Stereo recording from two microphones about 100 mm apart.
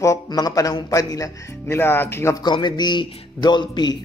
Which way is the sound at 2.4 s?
50° left (ahead or behind).